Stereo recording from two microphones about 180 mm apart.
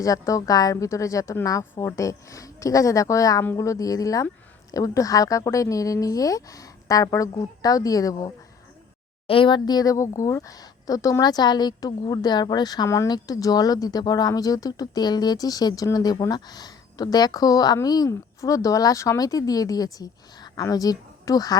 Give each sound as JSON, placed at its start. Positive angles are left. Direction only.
{"t": 0.0, "sound": "a woman's voice", "side_deg": 20}
{"t": 9.2, "sound": "speech", "side_deg": 30}